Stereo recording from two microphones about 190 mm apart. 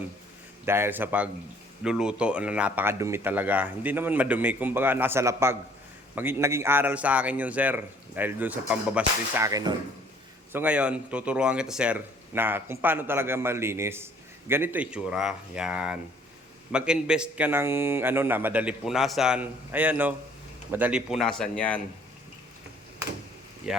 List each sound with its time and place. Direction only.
0.6 s speech: 10° right (ahead or behind)
10.5 s speech: 5° right (ahead or behind)
23.7 s speech: 5° right (ahead or behind)